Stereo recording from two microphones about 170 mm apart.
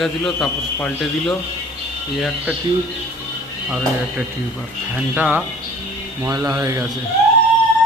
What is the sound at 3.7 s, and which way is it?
Speech, 5° right (ahead or behind).